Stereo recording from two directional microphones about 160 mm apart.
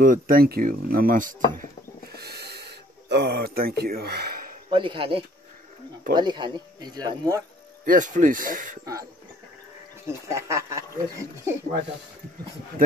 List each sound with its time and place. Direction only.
0.0 s speech: 60° right (ahead or behind)
2.1 s a sound: 85° right; by 4.6 s 70° right (ahead or behind)
4.6 s speech: 30° right (ahead or behind)
7.8 s speech: 55° right (ahead or behind)
10.0 s speech: 20° right (ahead or behind)